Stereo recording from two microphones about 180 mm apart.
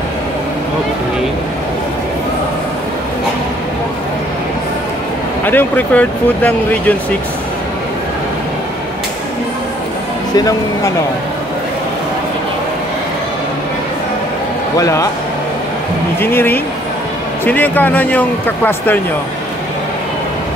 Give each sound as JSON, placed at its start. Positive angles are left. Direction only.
{"t": 5.4, "sound": "speech", "side_deg": 10}
{"t": 10.3, "sound": "speech", "side_deg": 20}
{"t": 14.8, "sound": "speech", "side_deg": 20}
{"t": 16.2, "sound": "speech", "side_deg": 10}